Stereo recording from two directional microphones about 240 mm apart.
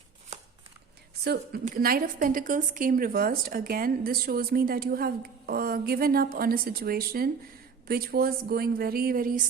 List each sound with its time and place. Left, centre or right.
1.2 s a woman's voice: right